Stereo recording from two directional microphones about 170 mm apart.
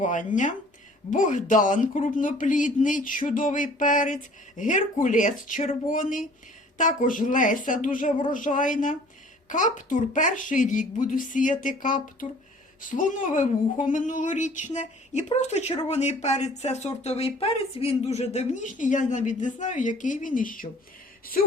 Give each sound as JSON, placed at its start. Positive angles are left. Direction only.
{"t": 0.0, "sound": "speech", "side_deg": 50}